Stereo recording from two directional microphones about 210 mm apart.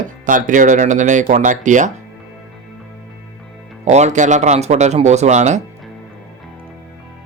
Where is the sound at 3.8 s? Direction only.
35° right (ahead or behind).